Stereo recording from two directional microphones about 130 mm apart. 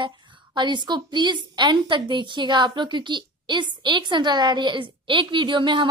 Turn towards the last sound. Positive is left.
turn(degrees=-40)  # may be behind; listen again after turning